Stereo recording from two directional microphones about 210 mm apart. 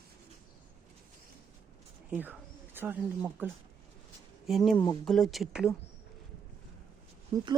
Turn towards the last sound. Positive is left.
turn(degrees=-15)  # may be behind; listen again after turning